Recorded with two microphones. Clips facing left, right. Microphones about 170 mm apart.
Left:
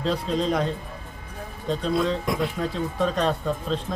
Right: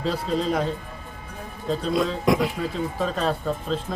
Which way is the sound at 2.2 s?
90° right.